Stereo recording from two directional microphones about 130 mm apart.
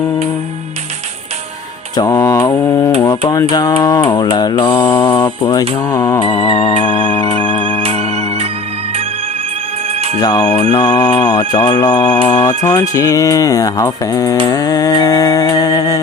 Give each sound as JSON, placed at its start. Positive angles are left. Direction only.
{"t": 2.0, "sound": "mantra", "side_deg": 25}
{"t": 3.1, "sound": "a sound", "side_deg": 30}
{"t": 3.5, "sound": "speech", "side_deg": 30}
{"t": 4.8, "sound": "mantra", "side_deg": 15}
{"t": 5.4, "sound": "mantra", "side_deg": 30}
{"t": 5.9, "sound": "speech", "side_deg": 30}
{"t": 6.5, "sound": "ringtone", "side_deg": 50}
{"t": 7.8, "sound": "ringtone", "side_deg": -50}
{"t": 10.2, "sound": "speech", "side_deg": 30}